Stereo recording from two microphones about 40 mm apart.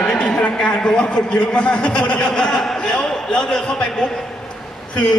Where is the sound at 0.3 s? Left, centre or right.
Left.